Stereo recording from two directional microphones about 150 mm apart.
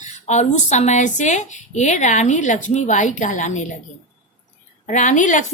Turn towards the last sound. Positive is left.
turn(degrees=55)  # may be behind; listen again after turning